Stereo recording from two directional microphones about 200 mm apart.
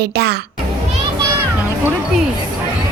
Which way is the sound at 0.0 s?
55° right (ahead or behind).